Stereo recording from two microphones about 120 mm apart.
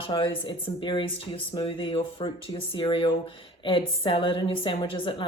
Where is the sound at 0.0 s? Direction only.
45° left (ahead or behind).